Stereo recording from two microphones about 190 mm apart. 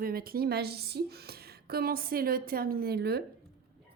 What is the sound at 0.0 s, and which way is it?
A woman's voice, 50° right (ahead or behind).